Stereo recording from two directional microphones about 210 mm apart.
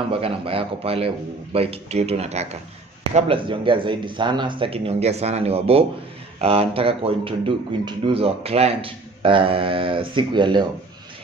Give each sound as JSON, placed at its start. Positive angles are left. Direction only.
{"t": 0.1, "sound": "a man's voice", "side_deg": -25}